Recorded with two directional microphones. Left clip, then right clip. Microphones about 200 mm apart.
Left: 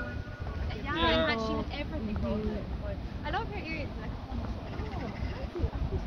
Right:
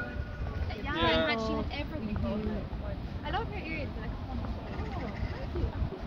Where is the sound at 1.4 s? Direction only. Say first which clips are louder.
Even; 35° right (ahead or behind).